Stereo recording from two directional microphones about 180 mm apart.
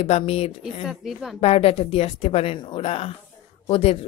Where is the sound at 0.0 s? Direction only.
35° left (ahead or behind).